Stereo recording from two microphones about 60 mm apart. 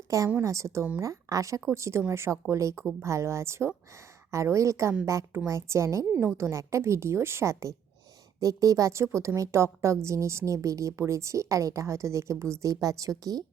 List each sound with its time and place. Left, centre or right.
0.1 s a woman's voice: right
1.7 s a woman's voice: right
2.5 s a woman's voice: right
6.1 s a woman's voice: right
6.3 s a woman's voice: right
8.4 s a woman's voice: right
12.7 s a woman's voice: right